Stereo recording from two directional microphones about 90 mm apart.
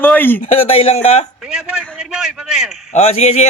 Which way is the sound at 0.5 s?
90° left.